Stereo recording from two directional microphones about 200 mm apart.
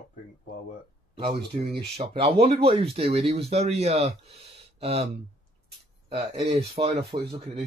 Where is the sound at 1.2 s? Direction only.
30° right (ahead or behind).